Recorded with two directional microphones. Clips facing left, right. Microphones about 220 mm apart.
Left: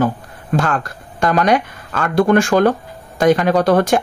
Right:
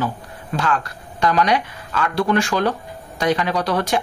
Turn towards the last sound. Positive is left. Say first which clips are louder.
# left 7 dB
turn(degrees=50)  # may be behind; listen again after turning